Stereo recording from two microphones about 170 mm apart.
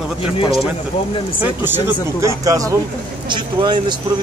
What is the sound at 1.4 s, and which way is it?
Speech, 10° right (ahead or behind).